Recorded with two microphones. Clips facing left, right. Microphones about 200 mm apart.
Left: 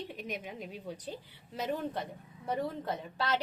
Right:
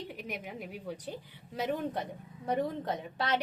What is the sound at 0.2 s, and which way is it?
A woman's voice, 10° right (ahead or behind).